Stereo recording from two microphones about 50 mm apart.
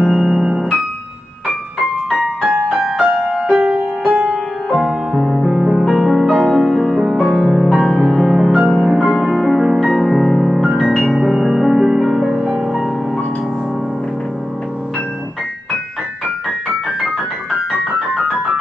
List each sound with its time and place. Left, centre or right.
0.0 s keyboard: centre
0.5 s piano: centre
1.5 s keyboard: centre
3.0 s music: centre
3.6 s music: right
4.6 s music: centre
5.1 s music: centre
5.5 s music: centre
17.0 s keyboard: centre